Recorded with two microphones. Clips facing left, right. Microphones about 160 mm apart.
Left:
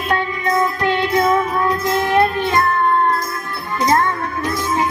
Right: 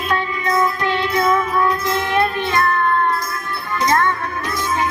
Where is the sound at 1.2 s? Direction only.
30° left (ahead or behind).